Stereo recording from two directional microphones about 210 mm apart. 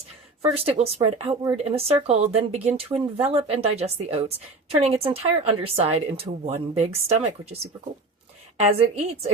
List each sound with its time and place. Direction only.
0.5 s speech: 30° right (ahead or behind)